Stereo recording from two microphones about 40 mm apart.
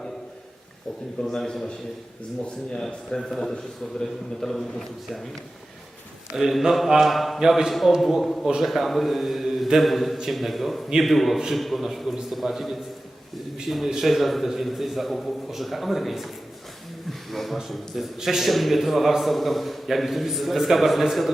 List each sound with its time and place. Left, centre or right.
1.2 s a man's voice: centre
3.2 s a man's voice: centre
6.3 s a man's voice: centre
7.3 s a man's voice: centre
7.7 s a man's voice: centre